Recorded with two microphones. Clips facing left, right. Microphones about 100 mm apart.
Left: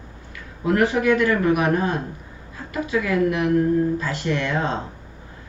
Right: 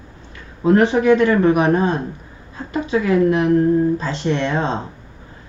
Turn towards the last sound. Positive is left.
turn(degrees=-25)  # may be behind; listen again after turning